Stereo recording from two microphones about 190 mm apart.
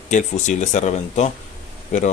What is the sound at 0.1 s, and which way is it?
Speech, 40° left (ahead or behind).